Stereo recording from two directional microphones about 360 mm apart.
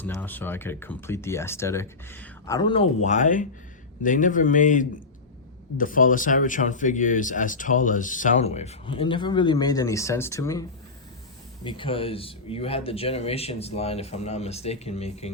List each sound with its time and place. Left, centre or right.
0.0 s speech: centre